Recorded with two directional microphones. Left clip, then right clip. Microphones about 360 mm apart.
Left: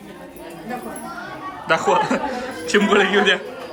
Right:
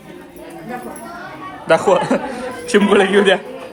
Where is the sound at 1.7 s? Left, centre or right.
Centre.